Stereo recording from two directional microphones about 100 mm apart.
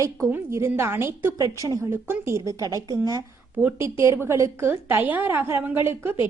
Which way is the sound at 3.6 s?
20° right (ahead or behind).